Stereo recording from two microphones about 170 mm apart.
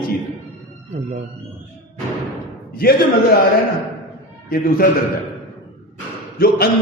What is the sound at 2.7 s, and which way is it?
Speech, 60° left (ahead or behind).